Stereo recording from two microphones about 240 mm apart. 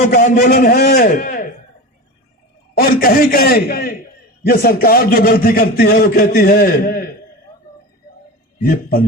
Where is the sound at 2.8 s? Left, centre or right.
Left.